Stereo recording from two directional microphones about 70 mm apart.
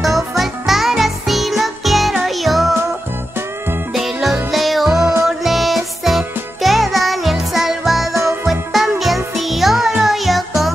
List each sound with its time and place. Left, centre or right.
0.0 s music: centre
3.9 s music: centre
8.1 s music: right
8.5 s music: centre